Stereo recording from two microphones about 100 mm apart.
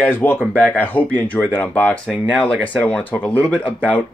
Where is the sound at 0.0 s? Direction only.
20° left (ahead or behind).